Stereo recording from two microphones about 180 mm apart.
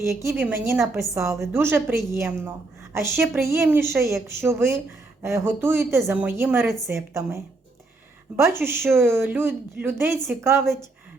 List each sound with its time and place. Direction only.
0.0 s a woman's voice: 15° right (ahead or behind)